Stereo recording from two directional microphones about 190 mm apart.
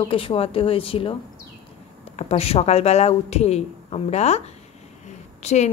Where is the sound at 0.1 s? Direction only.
30° left (ahead or behind).